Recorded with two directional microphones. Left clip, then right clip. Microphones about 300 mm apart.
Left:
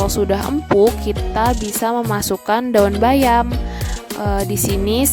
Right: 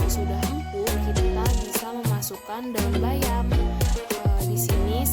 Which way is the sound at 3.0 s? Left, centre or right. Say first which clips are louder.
Left 14 dB; left.